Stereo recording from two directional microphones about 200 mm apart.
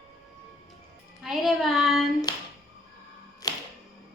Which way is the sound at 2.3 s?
20° left (ahead or behind).